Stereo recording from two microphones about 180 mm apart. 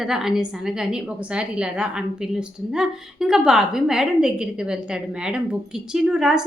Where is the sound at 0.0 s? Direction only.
5° right (ahead or behind).